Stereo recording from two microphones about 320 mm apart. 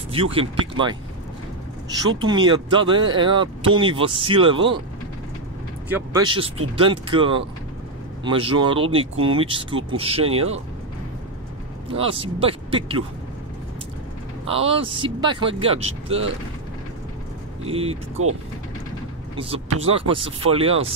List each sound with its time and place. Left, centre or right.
0.1 s speech: centre
1.9 s speech: centre
5.9 s speech: centre
12.0 s speech: centre
14.4 s speech: centre
17.6 s speech: centre
18.2 s speech: right
19.3 s speech: centre